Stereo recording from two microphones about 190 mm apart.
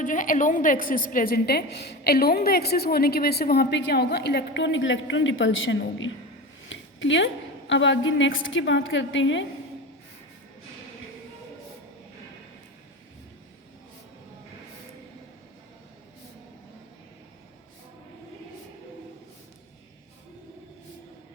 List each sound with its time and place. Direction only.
0.0 s a woman's voice: 45° left (ahead or behind); by 6.1 s 90° left
6.7 s a sound: 75° left (ahead or behind)
7.7 s a woman's voice: 75° left (ahead or behind)